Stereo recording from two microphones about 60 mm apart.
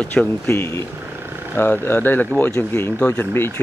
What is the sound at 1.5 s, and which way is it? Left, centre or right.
Speech, left.